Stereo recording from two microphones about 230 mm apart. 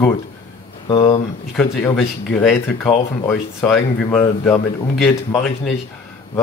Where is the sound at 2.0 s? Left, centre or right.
Centre.